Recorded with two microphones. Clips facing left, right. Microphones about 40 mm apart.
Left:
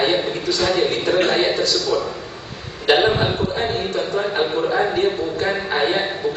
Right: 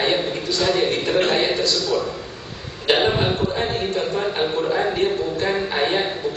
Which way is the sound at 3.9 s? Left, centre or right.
Left.